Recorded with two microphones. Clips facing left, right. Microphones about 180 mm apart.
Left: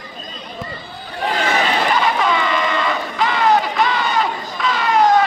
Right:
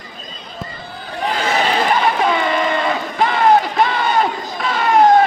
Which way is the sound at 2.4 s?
50° right (ahead or behind).